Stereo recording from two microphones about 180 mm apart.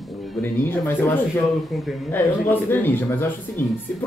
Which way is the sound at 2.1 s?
15° left (ahead or behind).